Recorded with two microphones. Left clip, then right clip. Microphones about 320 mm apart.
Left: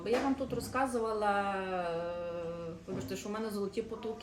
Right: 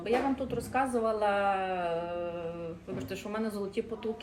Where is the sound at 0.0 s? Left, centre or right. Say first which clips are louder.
Right 2 dB; centre.